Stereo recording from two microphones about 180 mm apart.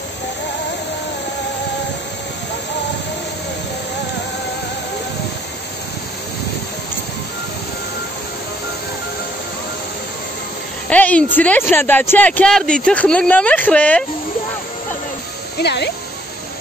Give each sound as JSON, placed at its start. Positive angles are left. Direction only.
{"t": 10.9, "sound": "a sound", "side_deg": 10}
{"t": 11.3, "sound": "speech", "side_deg": 10}
{"t": 15.5, "sound": "speech", "side_deg": 70}